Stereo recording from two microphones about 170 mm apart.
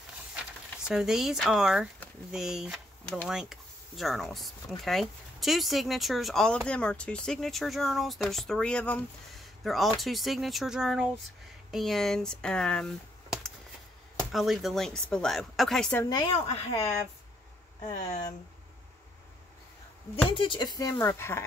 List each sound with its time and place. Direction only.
0.8 s speech: 5° right (ahead or behind)
16.0 s speech: 25° left (ahead or behind)
16.3 s speech: 35° left (ahead or behind)
20.2 s speech: 30° left (ahead or behind); by 21.5 s 15° left (ahead or behind)